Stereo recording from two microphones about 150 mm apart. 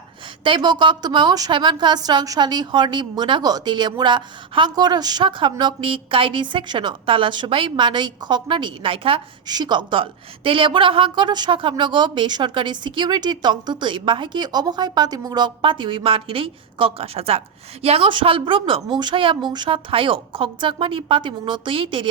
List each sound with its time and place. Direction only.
0.4 s a woman's voice: 30° right (ahead or behind)